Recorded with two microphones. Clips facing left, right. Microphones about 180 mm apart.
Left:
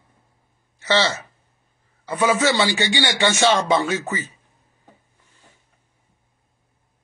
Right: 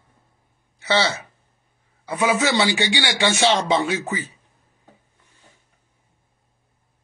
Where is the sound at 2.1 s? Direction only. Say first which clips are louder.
Left 1 dB; 10° right (ahead or behind).